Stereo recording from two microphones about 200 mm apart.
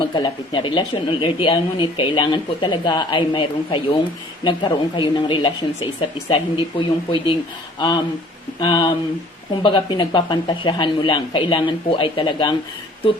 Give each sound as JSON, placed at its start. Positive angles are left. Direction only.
{"t": 0.0, "sound": "speech", "side_deg": 25}